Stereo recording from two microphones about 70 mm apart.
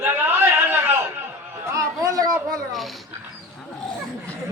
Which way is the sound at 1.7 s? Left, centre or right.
Right.